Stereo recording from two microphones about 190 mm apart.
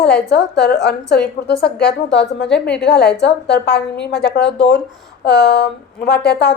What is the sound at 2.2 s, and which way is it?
Speech, 5° left (ahead or behind).